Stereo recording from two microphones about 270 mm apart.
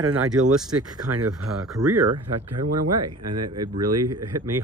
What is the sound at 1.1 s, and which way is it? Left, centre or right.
Speech, right.